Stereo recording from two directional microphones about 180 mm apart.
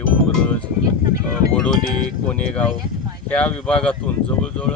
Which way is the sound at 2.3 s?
5° left (ahead or behind).